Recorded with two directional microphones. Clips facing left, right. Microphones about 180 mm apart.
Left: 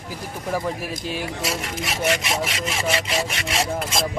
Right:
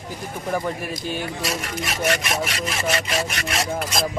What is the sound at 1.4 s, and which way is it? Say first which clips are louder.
Speech: even; 25° left (ahead or behind).